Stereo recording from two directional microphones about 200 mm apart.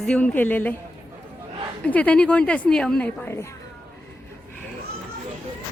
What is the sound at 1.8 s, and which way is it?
A woman's voice, 5° left (ahead or behind).